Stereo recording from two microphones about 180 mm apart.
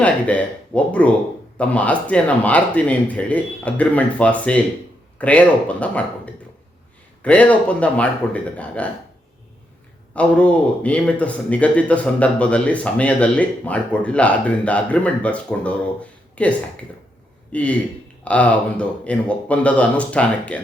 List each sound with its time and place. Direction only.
0.0 s a man's voice: 5° left (ahead or behind)
10.2 s a man's voice: 5° left (ahead or behind)